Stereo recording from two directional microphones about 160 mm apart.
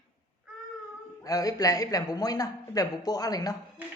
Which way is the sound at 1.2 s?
20° left (ahead or behind).